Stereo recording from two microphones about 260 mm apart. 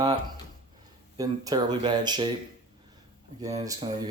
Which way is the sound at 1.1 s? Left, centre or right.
Centre.